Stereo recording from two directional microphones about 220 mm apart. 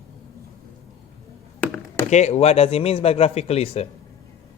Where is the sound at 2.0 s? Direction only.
30° left (ahead or behind).